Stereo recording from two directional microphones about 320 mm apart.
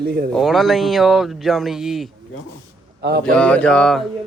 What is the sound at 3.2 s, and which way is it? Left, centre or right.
Speech, centre.